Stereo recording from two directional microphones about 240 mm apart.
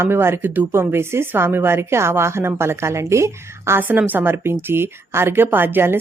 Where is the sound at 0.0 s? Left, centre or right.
Centre.